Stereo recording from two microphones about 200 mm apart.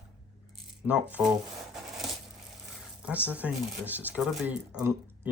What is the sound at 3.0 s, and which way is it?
Speech, 5° right (ahead or behind).